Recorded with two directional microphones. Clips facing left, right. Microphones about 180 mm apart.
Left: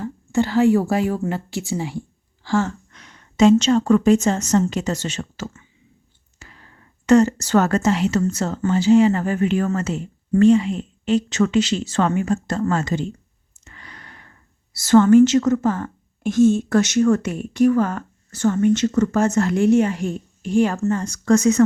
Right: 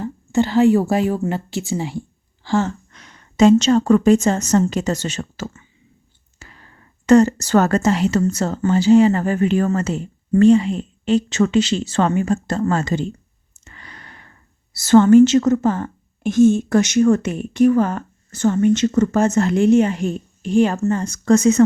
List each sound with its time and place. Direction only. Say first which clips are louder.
0.0 s a woman's voice: right 2 dB; 25° right (ahead or behind); by 5.6 s 40° right (ahead or behind)
6.4 s a sound: right 1 dB; 40° right (ahead or behind)
7.0 s a woman's voice: right 2 dB; 40° right (ahead or behind)
13.7 s clicking: right 1 dB; 30° right (ahead or behind)
14.7 s a woman's voice: right 2 dB; 25° right (ahead or behind)